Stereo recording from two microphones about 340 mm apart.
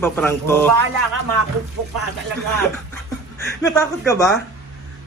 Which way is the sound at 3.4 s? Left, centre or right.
Centre.